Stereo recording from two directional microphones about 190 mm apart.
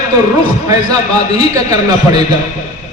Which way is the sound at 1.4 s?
20° right (ahead or behind).